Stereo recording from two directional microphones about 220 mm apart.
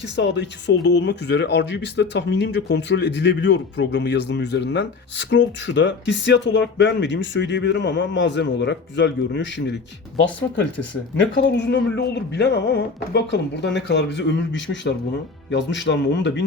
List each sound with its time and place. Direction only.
0.0 s speech: 55° left (ahead or behind)
11.4 s speech: 55° left (ahead or behind)